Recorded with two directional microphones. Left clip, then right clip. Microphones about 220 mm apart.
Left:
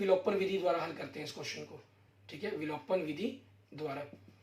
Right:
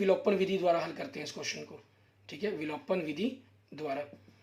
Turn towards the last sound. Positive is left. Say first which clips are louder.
# right 4 dB
turn(degrees=-45)  # may be behind; listen again after turning